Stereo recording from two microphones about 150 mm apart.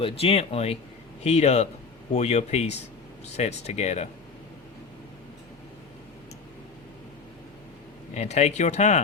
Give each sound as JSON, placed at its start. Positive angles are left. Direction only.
{"t": 0.0, "sound": "speech", "side_deg": 40}
{"t": 8.1, "sound": "speech", "side_deg": 50}